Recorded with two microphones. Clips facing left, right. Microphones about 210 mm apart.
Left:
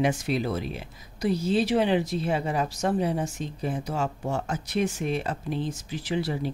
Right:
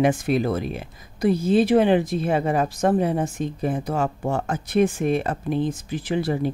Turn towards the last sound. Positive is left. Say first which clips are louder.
# right 5 dB
turn(degrees=-50)  # may be behind; listen again after turning